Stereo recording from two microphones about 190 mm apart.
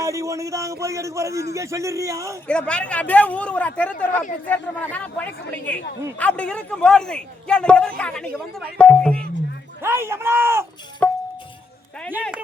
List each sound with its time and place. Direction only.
0.0 s a man's voice: 15° right (ahead or behind)
2.5 s a man's voice: 5° left (ahead or behind)
9.8 s a man's voice: 15° right (ahead or behind)
11.0 s music: 5° left (ahead or behind)